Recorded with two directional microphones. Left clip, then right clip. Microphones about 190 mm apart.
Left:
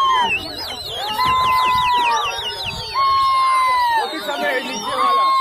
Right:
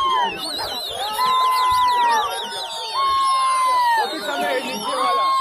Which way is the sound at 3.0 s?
40° left (ahead or behind).